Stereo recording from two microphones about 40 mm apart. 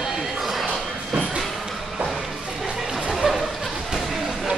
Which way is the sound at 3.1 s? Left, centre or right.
Centre.